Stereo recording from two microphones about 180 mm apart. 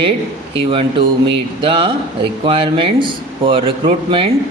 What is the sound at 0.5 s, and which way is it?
Speech, 30° right (ahead or behind).